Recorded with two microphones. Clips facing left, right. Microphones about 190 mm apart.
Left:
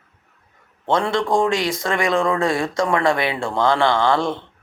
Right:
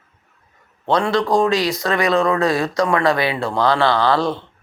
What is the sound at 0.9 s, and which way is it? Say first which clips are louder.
Speech: right 2 dB; 25° left (ahead or behind).